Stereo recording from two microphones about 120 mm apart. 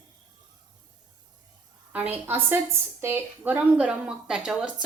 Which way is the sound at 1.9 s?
15° right (ahead or behind).